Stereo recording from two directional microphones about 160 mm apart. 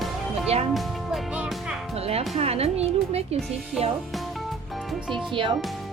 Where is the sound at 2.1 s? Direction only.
40° right (ahead or behind).